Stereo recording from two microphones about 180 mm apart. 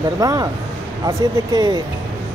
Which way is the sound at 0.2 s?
20° right (ahead or behind).